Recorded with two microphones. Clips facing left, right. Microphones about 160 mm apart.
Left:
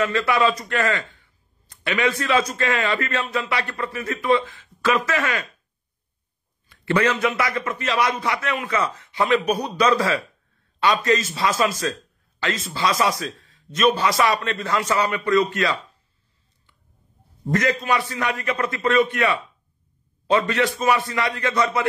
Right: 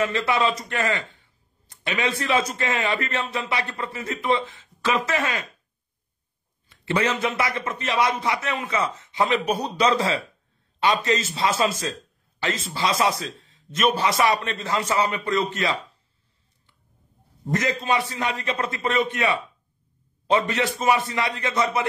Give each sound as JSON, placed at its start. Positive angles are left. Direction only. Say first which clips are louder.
{"t": 0.0, "sound": "a man's voice", "louder": "left 2 dB", "side_deg": -25}
{"t": 6.7, "sound": "a sound", "louder": "left 3 dB", "side_deg": -25}
{"t": 7.1, "sound": "a man's voice", "louder": "left 2 dB", "side_deg": -25}
{"t": 17.6, "sound": "speech", "louder": "even", "side_deg": -25}